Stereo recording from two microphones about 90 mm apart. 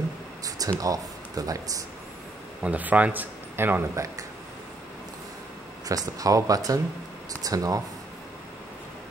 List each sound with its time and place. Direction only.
0.7 s speech: 40° right (ahead or behind)
2.6 s a man's voice: 15° right (ahead or behind)
5.9 s speech: 40° right (ahead or behind)